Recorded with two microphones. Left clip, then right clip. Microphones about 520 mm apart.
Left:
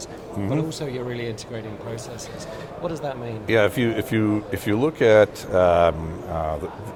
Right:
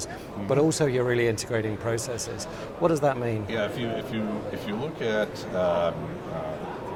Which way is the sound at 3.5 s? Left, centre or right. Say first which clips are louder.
Left 9 dB; left.